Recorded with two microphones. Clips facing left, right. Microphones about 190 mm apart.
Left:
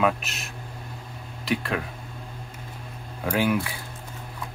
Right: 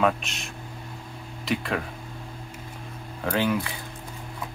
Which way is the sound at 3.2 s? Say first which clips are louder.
Left 1 dB; 10° left (ahead or behind).